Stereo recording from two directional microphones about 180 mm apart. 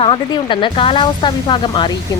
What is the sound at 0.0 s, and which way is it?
Speech, 30° left (ahead or behind).